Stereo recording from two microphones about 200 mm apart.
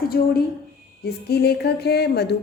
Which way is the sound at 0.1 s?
45° left (ahead or behind).